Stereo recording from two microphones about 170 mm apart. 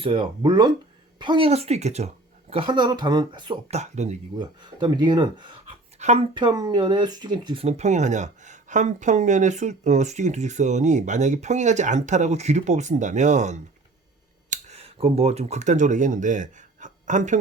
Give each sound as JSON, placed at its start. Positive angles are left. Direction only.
{"t": 0.0, "sound": "speech", "side_deg": -30}
{"t": 3.7, "sound": "speech", "side_deg": -40}
{"t": 4.4, "sound": "speech", "side_deg": -25}
{"t": 6.0, "sound": "speech", "side_deg": -40}
{"t": 6.3, "sound": "speech", "side_deg": -25}